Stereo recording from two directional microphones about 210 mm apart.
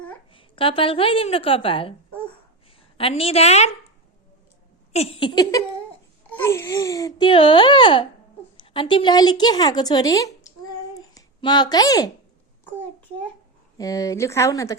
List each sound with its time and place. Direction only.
0.3 s a woman's voice: 25° left (ahead or behind)
3.0 s a woman's voice: 25° left (ahead or behind)
4.9 s a woman's voice: 30° left (ahead or behind)
10.9 s a sound: 20° left (ahead or behind)
13.7 s speech: 15° left (ahead or behind)